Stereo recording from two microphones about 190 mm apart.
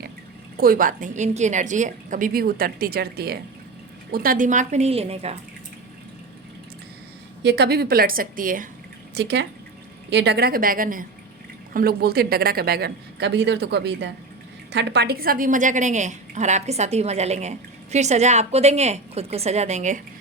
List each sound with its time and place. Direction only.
0.5 s a woman's voice: 50° right (ahead or behind); by 5.3 s 30° right (ahead or behind)
7.4 s a woman's voice: 60° right (ahead or behind)
9.1 s a woman's voice: 60° right (ahead or behind); by 20.0 s 40° right (ahead or behind)